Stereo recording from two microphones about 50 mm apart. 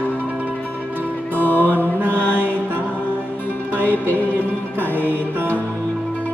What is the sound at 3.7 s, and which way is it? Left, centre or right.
Music, right.